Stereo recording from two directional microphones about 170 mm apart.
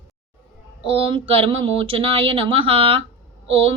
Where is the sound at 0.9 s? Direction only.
30° right (ahead or behind).